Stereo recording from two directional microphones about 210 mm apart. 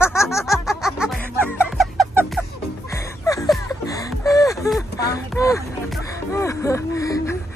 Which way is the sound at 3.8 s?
15° left (ahead or behind).